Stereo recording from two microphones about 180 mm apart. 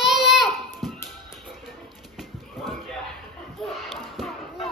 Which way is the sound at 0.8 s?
Centre (ahead or behind).